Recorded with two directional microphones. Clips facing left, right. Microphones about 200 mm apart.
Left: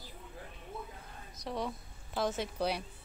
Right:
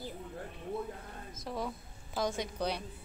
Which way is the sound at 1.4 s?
Centre (ahead or behind).